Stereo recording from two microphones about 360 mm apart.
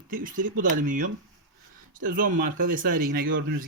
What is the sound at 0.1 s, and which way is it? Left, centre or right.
Speech, right.